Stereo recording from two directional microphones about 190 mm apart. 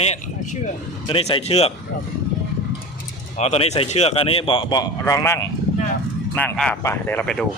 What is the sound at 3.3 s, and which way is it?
A man's voice, 35° left (ahead or behind).